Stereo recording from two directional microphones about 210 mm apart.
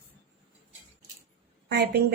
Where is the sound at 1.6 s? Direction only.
50° right (ahead or behind).